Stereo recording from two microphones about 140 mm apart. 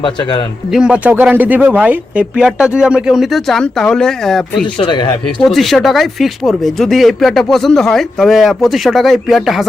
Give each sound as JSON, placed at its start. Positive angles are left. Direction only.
{"t": 0.0, "sound": "a man's voice", "side_deg": 35}
{"t": 0.7, "sound": "speech", "side_deg": -5}
{"t": 4.8, "sound": "a man's voice", "side_deg": 35}
{"t": 5.4, "sound": "speech", "side_deg": 0}